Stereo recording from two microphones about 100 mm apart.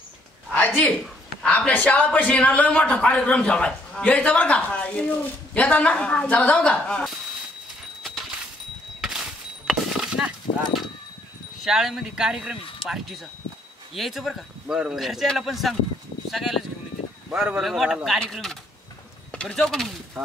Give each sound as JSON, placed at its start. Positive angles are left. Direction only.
{"t": 0.6, "sound": "a sound", "side_deg": 15}
{"t": 1.7, "sound": "speech", "side_deg": 15}
{"t": 8.0, "sound": "a sound", "side_deg": 0}
{"t": 9.0, "sound": "horse", "side_deg": -5}
{"t": 11.6, "sound": "speech", "side_deg": -5}
{"t": 13.9, "sound": "speech", "side_deg": 0}
{"t": 17.3, "sound": "speech", "side_deg": -10}